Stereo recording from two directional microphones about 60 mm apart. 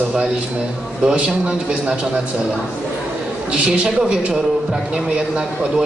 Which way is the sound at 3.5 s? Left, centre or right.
Centre.